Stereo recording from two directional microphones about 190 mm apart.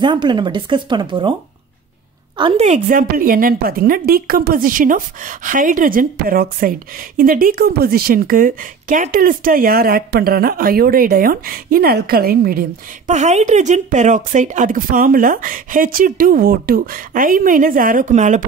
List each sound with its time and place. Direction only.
0.0 s speech: 25° right (ahead or behind)
2.3 s a woman's voice: 25° right (ahead or behind)
2.6 s a woman's voice: 40° right (ahead or behind)